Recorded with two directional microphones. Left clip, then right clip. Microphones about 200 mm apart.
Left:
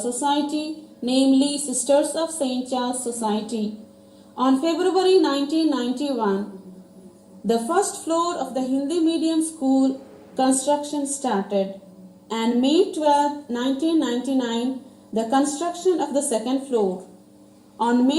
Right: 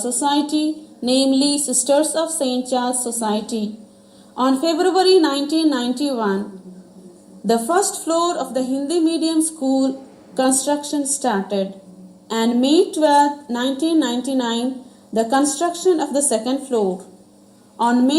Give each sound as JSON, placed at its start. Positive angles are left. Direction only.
{"t": 1.0, "sound": "speech", "side_deg": -40}
{"t": 7.4, "sound": "speech", "side_deg": -40}